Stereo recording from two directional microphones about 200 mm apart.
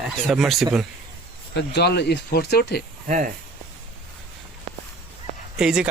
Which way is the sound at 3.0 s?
40° right (ahead or behind).